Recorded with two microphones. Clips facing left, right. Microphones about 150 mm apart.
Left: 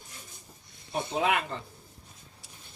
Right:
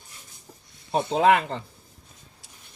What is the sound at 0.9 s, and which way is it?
Speech, 85° right.